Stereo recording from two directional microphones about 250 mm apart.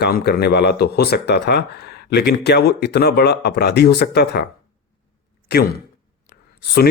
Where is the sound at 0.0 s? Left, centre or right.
Left.